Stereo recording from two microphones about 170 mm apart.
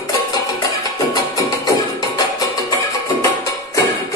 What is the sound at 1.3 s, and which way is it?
Music, 20° left (ahead or behind).